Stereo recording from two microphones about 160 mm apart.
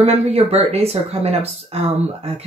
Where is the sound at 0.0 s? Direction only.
40° right (ahead or behind).